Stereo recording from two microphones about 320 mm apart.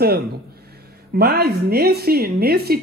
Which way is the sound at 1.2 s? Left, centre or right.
Right.